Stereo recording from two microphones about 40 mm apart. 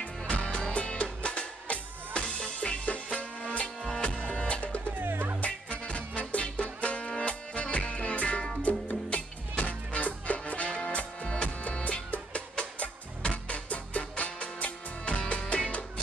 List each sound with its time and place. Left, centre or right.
0.0 s music: left
3.6 s music: centre
4.2 s music: left
4.9 s music: right
5.5 s music: left